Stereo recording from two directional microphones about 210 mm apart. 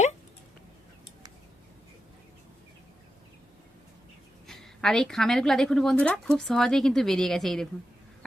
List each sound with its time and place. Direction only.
4.4 s speech: centre (ahead or behind)